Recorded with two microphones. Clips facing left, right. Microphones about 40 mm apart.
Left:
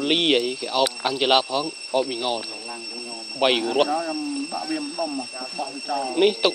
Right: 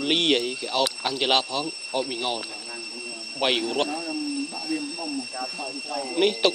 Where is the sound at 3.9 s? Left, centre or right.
Left.